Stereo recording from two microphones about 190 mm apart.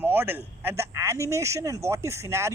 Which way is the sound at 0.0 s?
10° right (ahead or behind).